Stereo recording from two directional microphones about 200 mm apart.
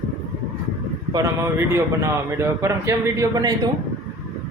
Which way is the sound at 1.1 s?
15° right (ahead or behind).